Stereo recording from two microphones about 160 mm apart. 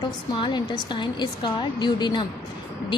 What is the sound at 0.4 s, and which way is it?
A woman's voice, 30° left (ahead or behind).